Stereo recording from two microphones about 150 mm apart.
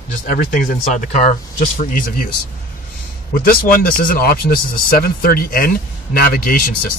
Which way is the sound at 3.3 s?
70° left (ahead or behind).